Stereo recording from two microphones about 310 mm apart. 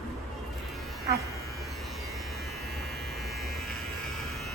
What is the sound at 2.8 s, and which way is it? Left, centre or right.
Electric shaver, centre.